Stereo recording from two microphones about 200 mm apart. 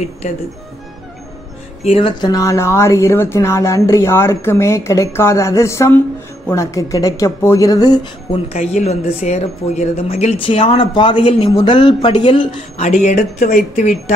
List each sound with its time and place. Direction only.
1.8 s speech: 30° left (ahead or behind)
8.5 s speech: 35° left (ahead or behind)